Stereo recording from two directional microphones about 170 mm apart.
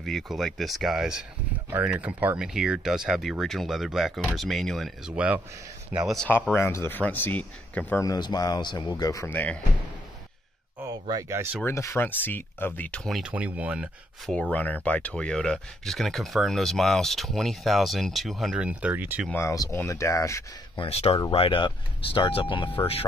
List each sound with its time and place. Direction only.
0.0 s speech: centre (ahead or behind)
6.0 s speech: 5° left (ahead or behind)
8.0 s speech: 25° left (ahead or behind)
11.1 s speech: 20° right (ahead or behind)
11.6 s speech: 15° left (ahead or behind); by 14.3 s 5° right (ahead or behind)
14.3 s speech: 5° left (ahead or behind); by 19.2 s 10° right (ahead or behind)
19.2 s speech: 15° left (ahead or behind)
20.7 s speech: 35° left (ahead or behind)